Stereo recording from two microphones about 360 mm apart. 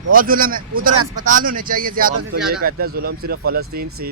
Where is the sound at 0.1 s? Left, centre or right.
Right.